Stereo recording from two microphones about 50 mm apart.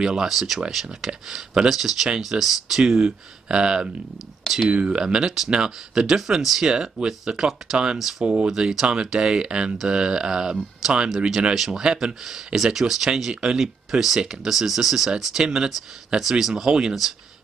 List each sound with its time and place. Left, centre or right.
0.0 s speech: centre